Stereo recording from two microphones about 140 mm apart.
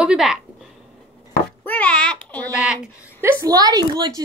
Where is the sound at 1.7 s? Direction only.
10° left (ahead or behind).